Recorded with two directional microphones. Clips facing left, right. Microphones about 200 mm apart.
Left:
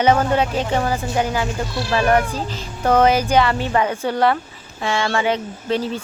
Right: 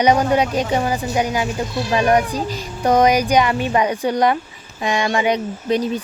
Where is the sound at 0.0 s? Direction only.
15° right (ahead or behind).